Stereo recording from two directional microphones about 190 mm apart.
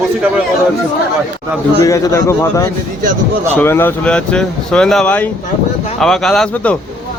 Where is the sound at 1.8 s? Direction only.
15° left (ahead or behind).